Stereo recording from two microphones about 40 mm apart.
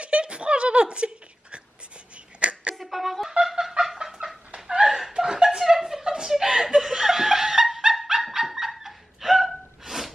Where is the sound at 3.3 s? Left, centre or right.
Centre.